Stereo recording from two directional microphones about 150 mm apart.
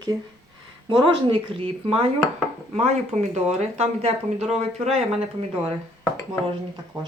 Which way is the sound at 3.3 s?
45° right (ahead or behind).